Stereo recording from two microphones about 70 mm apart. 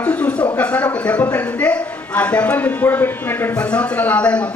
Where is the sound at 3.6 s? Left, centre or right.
Centre.